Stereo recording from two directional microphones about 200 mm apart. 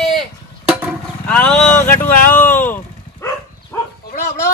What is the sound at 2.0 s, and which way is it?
Speech, 40° left (ahead or behind).